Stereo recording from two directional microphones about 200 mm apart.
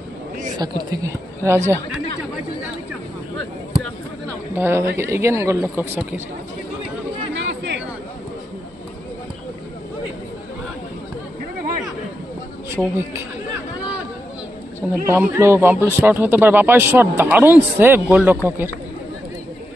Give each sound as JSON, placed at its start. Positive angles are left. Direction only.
{"t": 0.6, "sound": "speech", "side_deg": -20}
{"t": 4.6, "sound": "speech", "side_deg": -10}
{"t": 7.3, "sound": "chatter", "side_deg": -60}
{"t": 12.7, "sound": "speech", "side_deg": -10}
{"t": 14.8, "sound": "speech", "side_deg": -5}